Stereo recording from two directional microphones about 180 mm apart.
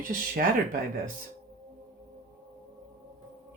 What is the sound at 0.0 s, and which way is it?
Speech, 50° right (ahead or behind).